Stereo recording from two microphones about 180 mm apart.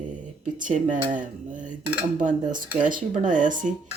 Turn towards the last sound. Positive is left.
turn(degrees=-45)  # may be behind; listen again after turning